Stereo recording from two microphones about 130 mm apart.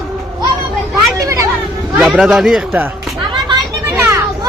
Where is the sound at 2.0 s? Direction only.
5° right (ahead or behind).